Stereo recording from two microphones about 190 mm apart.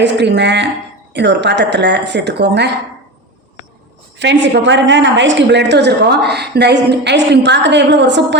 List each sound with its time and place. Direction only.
0.0 s a woman's voice: 65° right (ahead or behind)
4.2 s a woman's voice: 65° right (ahead or behind)